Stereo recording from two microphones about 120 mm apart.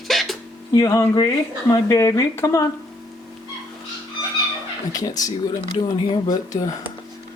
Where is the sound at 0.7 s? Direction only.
25° left (ahead or behind).